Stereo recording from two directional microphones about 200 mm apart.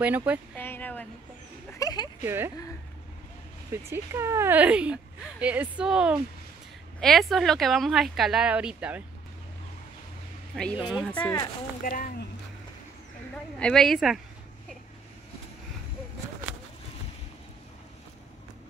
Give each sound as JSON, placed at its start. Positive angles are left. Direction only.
{"t": 0.0, "sound": "speech", "side_deg": -5}
{"t": 0.6, "sound": "a sound", "side_deg": 10}
{"t": 2.2, "sound": "speech", "side_deg": -10}
{"t": 3.7, "sound": "speech", "side_deg": -15}
{"t": 10.5, "sound": "speech", "side_deg": 0}
{"t": 11.8, "sound": "speech", "side_deg": 45}
{"t": 13.6, "sound": "speech", "side_deg": 5}